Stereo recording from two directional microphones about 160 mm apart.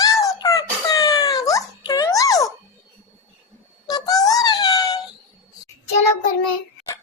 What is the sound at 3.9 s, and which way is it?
Synthetic singing, 25° left (ahead or behind).